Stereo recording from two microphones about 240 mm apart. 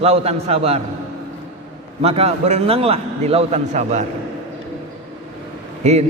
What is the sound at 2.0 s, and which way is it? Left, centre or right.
A man's voice, right.